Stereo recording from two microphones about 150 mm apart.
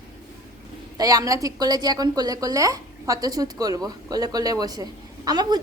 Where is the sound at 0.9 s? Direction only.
25° right (ahead or behind).